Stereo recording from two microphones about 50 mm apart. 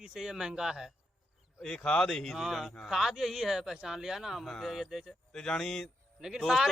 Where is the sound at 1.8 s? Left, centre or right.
Centre.